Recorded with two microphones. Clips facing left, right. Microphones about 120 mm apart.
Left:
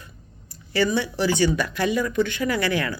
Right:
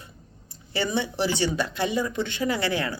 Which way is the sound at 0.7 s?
20° right (ahead or behind).